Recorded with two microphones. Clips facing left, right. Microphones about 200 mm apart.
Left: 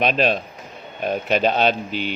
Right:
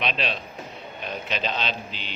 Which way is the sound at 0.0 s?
45° left (ahead or behind).